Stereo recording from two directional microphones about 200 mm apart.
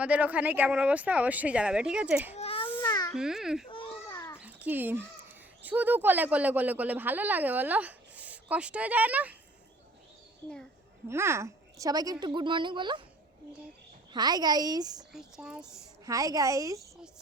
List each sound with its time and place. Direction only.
0.0 s speech: 5° right (ahead or behind)
2.3 s a child's voice: 30° left (ahead or behind)
2.8 s baby cry: 15° left (ahead or behind)
3.2 s speech: centre (ahead or behind)
3.7 s a sound: 25° left (ahead or behind)
4.4 s speech: 10° right (ahead or behind)
11.1 s a woman's voice: 15° right (ahead or behind)
14.1 s a woman's voice: 20° right (ahead or behind)
15.1 s speech: 5° right (ahead or behind)
16.0 s speech: 15° right (ahead or behind)